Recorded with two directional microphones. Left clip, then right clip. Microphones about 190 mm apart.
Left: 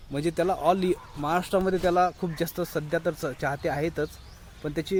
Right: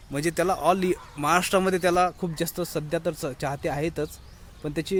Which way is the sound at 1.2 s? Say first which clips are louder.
Right 5 dB; 25° right (ahead or behind).